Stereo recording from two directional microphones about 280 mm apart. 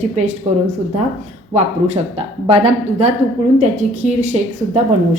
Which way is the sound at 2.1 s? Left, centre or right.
Centre.